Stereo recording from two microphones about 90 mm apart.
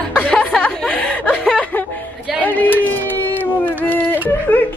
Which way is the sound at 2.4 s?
20° left (ahead or behind).